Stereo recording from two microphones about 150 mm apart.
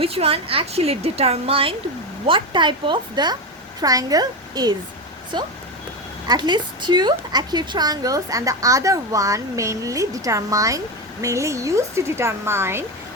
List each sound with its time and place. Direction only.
0.0 s a woman's voice: 40° right (ahead or behind); by 12.8 s 15° right (ahead or behind)